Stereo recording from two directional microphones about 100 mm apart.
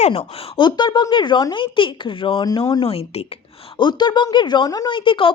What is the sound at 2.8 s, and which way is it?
Speech, 75° left (ahead or behind).